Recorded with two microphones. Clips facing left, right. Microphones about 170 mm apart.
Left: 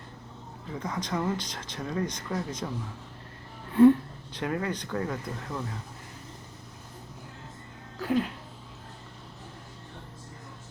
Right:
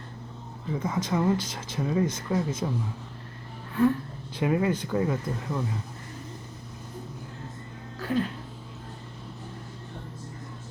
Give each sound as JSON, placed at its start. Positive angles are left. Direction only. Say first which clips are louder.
{"t": 0.8, "sound": "speech", "louder": "right 4 dB", "side_deg": -5}
{"t": 3.7, "sound": "a sound", "louder": "left 6 dB", "side_deg": 25}
{"t": 4.4, "sound": "speech", "louder": "right 6 dB", "side_deg": -10}
{"t": 8.0, "sound": "speech", "louder": "even", "side_deg": 10}